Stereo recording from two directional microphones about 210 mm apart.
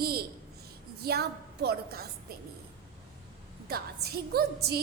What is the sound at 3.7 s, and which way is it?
A woman's voice, 50° right (ahead or behind).